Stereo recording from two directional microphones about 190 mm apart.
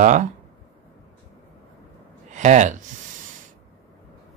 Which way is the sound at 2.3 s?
40° right (ahead or behind).